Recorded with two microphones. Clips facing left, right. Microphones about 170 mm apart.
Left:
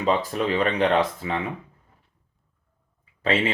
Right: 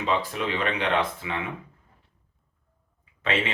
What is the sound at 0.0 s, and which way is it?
Speech, 40° left (ahead or behind).